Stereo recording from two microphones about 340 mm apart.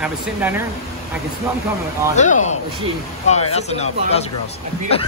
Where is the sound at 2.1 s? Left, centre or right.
Left.